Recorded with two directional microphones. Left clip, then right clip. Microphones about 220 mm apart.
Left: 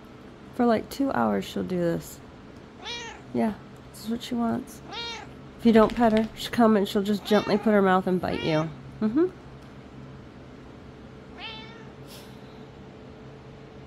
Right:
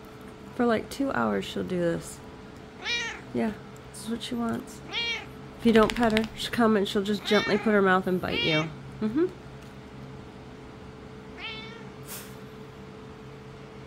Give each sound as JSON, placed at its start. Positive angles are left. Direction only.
{"t": 0.6, "sound": "speech", "side_deg": 15}
{"t": 2.8, "sound": "cat", "side_deg": -10}
{"t": 4.0, "sound": "speech", "side_deg": 15}
{"t": 4.9, "sound": "cat", "side_deg": -15}
{"t": 5.6, "sound": "speech", "side_deg": 15}